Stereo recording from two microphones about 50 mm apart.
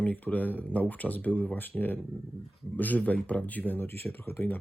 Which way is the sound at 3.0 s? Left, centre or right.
Left.